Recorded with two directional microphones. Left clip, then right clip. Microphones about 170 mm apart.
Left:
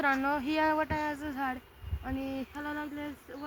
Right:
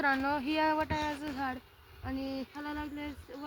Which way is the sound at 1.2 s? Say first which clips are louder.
Left 2 dB; 20° left (ahead or behind).